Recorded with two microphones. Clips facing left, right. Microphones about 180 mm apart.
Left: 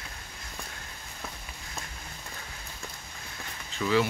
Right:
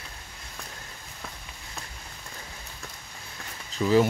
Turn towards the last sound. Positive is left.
turn(degrees=-40)  # may be behind; listen again after turning